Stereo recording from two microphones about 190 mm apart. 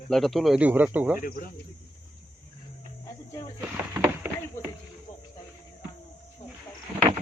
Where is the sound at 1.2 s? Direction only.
50° left (ahead or behind).